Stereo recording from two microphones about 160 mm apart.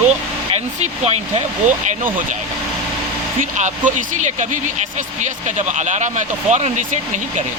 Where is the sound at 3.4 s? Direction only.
50° right (ahead or behind).